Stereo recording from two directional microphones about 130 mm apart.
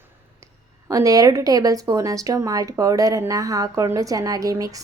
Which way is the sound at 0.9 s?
25° right (ahead or behind).